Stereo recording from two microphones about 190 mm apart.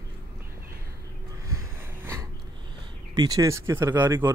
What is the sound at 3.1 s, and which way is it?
Speech, 20° right (ahead or behind).